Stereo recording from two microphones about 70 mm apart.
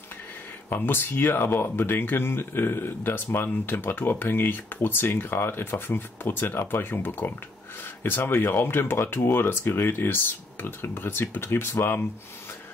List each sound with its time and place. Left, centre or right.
0.7 s speech: left